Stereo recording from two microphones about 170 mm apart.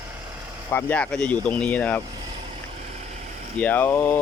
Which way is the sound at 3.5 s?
10° left (ahead or behind).